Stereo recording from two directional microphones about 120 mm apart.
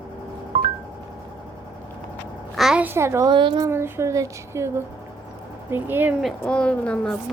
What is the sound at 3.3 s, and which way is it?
Speech, 40° right (ahead or behind).